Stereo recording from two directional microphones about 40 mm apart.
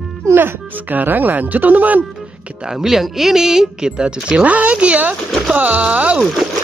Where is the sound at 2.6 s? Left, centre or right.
Centre.